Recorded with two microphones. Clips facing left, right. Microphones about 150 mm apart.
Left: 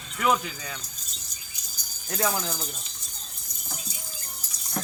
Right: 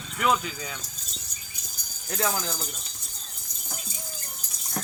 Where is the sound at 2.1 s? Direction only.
5° left (ahead or behind).